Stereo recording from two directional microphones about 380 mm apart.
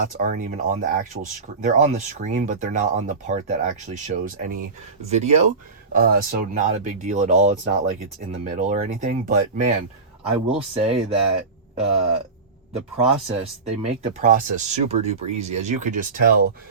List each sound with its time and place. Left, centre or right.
0.0 s speech: right